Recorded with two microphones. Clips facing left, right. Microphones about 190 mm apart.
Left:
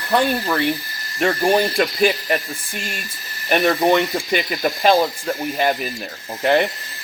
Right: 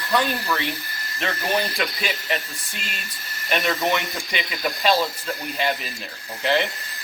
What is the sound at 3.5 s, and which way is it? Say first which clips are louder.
Speech: left 7 dB; 50° left (ahead or behind).